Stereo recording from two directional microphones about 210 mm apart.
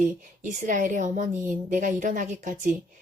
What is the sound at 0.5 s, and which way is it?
Speech, 35° right (ahead or behind).